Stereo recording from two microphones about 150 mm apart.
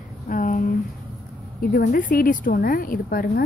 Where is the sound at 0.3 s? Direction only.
60° left (ahead or behind).